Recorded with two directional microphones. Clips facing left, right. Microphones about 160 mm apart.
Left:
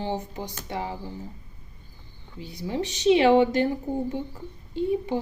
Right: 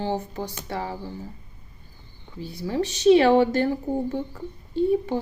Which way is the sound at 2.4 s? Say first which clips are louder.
Right 3 dB; 15° left (ahead or behind).